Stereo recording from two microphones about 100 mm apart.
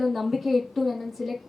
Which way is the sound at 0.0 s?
Centre (ahead or behind).